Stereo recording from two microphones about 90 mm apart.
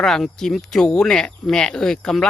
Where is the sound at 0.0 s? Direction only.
5° left (ahead or behind).